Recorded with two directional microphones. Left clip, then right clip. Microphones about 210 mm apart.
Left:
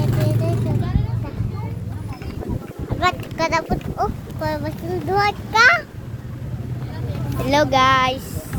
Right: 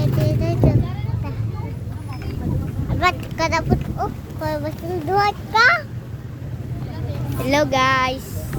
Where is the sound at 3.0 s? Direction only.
Centre (ahead or behind).